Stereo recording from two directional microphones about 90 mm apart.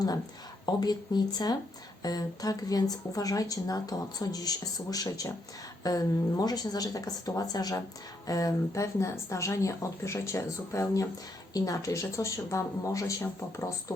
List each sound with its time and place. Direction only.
0.6 s a woman's voice: 50° left (ahead or behind); by 13.9 s 30° left (ahead or behind)